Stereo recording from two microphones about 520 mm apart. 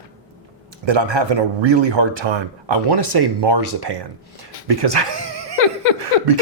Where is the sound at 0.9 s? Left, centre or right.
Right.